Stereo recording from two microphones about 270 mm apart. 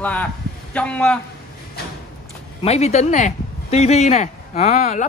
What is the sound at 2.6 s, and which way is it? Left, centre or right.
Speech, left.